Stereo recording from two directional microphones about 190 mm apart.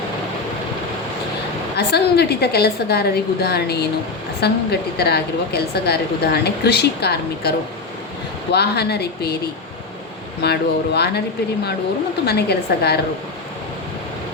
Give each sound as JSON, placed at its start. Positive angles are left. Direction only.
{"t": 1.7, "sound": "a woman's voice", "side_deg": 60}
{"t": 8.5, "sound": "a woman's voice", "side_deg": 60}
{"t": 10.4, "sound": "a woman's voice", "side_deg": 60}
{"t": 12.2, "sound": "a woman's voice", "side_deg": 55}